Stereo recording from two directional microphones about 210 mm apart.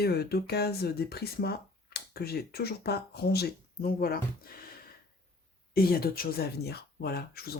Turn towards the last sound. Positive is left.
turn(degrees=50)  # may be behind; listen again after turning